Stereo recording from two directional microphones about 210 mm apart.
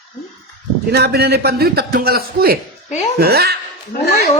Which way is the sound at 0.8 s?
50° right (ahead or behind).